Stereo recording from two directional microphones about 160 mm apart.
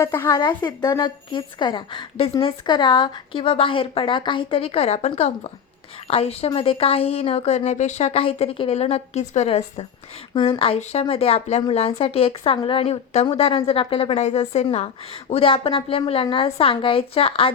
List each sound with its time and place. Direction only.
0.0 s a woman's voice: 15° left (ahead or behind); by 9.8 s 40° left (ahead or behind)
10.3 s a woman's voice: 30° left (ahead or behind)